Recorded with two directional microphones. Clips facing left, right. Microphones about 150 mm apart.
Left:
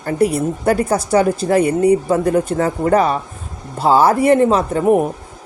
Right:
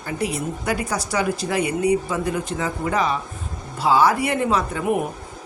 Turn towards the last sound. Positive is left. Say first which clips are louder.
# left 7 dB
turn(degrees=35)  # may be behind; listen again after turning